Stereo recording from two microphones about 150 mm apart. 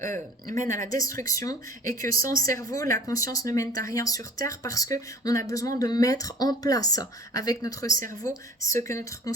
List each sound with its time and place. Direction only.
0.4 s a woman's voice: 60° right (ahead or behind)
0.9 s speech: 20° left (ahead or behind)